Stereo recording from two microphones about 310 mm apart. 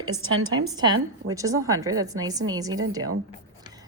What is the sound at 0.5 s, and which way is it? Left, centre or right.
A woman's voice, centre.